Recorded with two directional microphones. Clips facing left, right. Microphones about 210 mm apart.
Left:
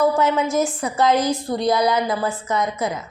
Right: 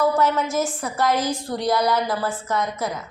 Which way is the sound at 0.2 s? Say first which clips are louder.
Left 2 dB; 20° left (ahead or behind).